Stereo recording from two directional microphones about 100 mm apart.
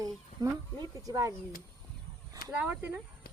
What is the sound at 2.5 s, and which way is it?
Speech, 15° right (ahead or behind).